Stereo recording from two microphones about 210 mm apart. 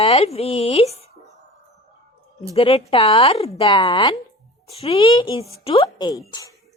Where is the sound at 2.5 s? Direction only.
25° left (ahead or behind).